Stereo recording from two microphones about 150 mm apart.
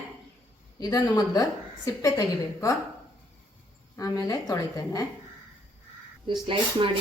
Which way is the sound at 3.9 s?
25° left (ahead or behind).